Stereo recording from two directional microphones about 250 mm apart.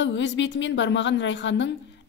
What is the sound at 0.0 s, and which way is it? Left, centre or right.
A woman's voice, left.